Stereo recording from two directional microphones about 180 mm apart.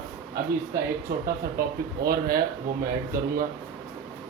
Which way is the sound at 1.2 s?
55° right (ahead or behind).